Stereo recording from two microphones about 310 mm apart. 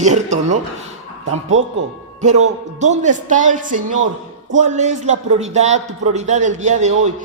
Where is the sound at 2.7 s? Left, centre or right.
Right.